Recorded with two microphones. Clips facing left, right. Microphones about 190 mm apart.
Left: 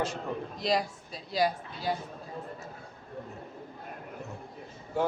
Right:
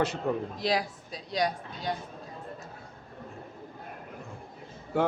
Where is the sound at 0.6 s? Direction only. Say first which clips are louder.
Left 4 dB; centre (ahead or behind).